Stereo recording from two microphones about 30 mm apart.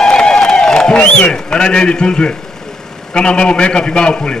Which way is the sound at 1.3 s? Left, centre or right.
Left.